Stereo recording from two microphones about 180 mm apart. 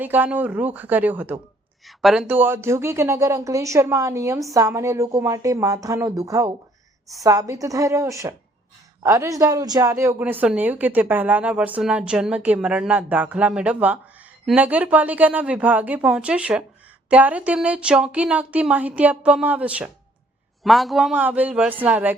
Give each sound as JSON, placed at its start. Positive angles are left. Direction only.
{"t": 0.0, "sound": "a woman's voice", "side_deg": -10}